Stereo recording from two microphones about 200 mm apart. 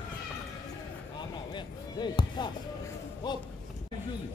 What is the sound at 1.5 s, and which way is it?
Basketball bounce, 20° left (ahead or behind).